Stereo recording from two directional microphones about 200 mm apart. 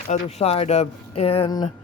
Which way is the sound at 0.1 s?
30° left (ahead or behind).